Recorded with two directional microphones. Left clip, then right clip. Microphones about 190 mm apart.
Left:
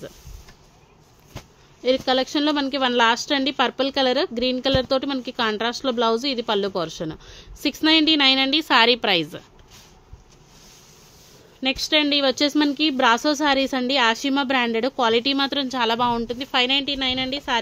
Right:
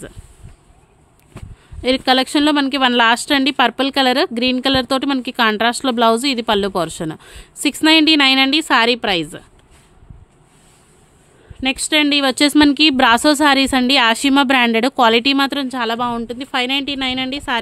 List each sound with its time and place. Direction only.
1.8 s speech: 45° right (ahead or behind); by 9.4 s 25° right (ahead or behind)
11.6 s speech: 35° right (ahead or behind)